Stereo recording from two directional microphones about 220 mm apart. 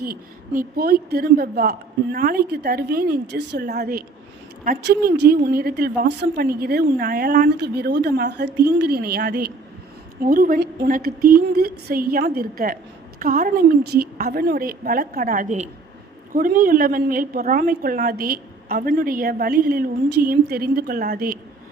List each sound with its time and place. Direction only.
0.0 s a woman's voice: 40° right (ahead or behind)